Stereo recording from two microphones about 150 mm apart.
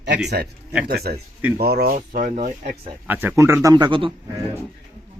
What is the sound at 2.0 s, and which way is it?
Speech, 60° right (ahead or behind).